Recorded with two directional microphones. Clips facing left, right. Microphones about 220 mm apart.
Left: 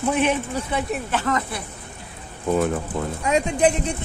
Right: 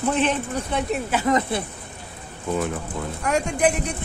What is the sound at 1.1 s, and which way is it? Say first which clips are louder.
Speech: right 4 dB; 20° right (ahead or behind).